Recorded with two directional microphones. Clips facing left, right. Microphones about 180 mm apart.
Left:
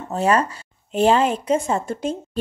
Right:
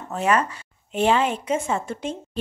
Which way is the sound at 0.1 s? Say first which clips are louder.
Left 3 dB; 35° left (ahead or behind).